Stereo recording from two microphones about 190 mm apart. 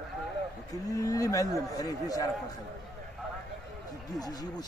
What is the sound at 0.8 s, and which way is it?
A man's voice, 15° left (ahead or behind).